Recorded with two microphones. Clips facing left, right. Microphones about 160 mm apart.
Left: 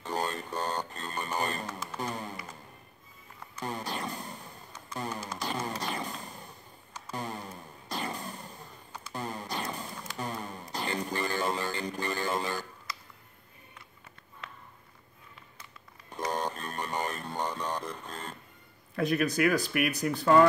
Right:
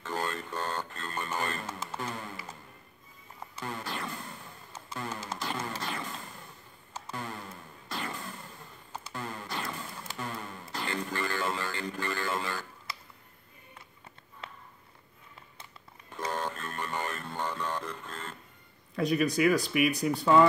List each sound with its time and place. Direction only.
0.0 s a sound: 15° left (ahead or behind)
2.0 s music: 15° left (ahead or behind)
3.5 s a sound: 15° left (ahead or behind)
5.4 s music: 15° left (ahead or behind)
16.1 s music: 15° left (ahead or behind)
18.9 s speech: centre (ahead or behind)